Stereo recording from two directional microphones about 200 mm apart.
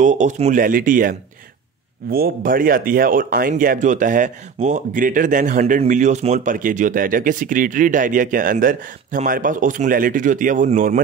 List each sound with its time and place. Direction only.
0.0 s a man's voice: 35° right (ahead or behind)